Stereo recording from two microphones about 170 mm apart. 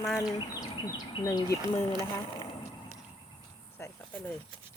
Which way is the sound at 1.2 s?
20° left (ahead or behind).